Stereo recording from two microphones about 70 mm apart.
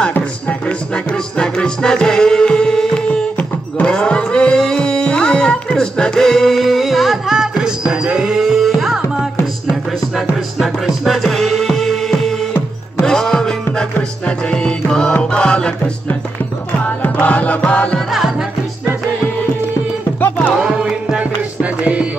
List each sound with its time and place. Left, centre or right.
0.2 s music: centre
17.9 s music: centre
20.5 s music: centre